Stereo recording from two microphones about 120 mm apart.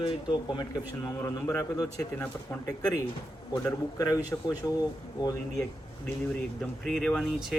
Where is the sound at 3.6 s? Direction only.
30° left (ahead or behind).